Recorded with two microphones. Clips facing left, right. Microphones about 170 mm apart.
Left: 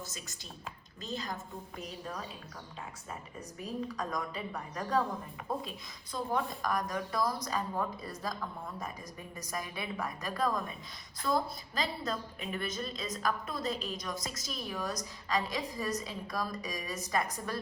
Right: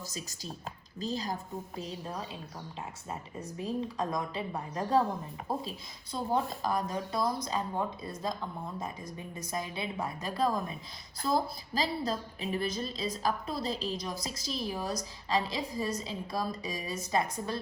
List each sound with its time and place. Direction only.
0.1 s a woman's voice: 35° right (ahead or behind)
3.6 s a woman's voice: 30° right (ahead or behind)
6.1 s a woman's voice: 30° right (ahead or behind)